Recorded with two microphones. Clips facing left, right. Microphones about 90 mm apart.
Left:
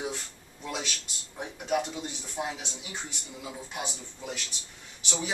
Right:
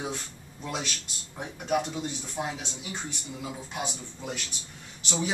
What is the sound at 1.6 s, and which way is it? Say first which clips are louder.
Speech: right 1 dB; 10° right (ahead or behind).